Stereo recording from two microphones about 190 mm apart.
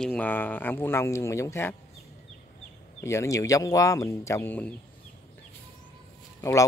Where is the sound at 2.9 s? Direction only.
15° left (ahead or behind).